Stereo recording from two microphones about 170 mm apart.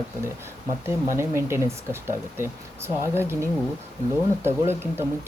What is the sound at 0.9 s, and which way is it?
Speech, 15° right (ahead or behind).